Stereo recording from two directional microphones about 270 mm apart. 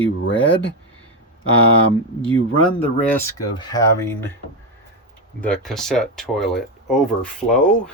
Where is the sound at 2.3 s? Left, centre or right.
Left.